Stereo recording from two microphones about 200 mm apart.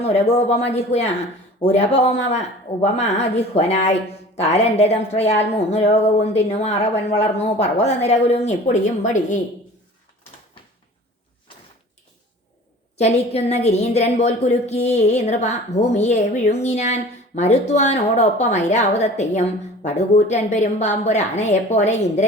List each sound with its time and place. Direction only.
0.0 s a woman's voice: 30° left (ahead or behind)
13.0 s a woman's voice: 30° left (ahead or behind)